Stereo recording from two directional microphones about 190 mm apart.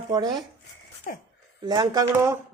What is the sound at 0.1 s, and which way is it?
Speech, 20° right (ahead or behind).